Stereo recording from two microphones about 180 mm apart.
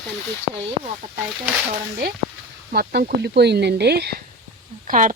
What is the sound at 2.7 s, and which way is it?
Speech, 60° right (ahead or behind).